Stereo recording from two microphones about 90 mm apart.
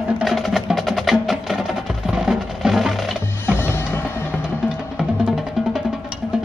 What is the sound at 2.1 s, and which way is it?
Music, 5° right (ahead or behind).